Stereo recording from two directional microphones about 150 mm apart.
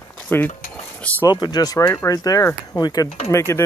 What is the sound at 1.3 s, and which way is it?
Speech, 25° left (ahead or behind).